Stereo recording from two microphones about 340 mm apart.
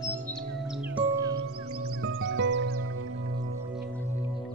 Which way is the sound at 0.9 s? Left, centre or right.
Centre.